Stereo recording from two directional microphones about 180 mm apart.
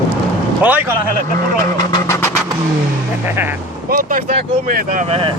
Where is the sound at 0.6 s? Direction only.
10° right (ahead or behind).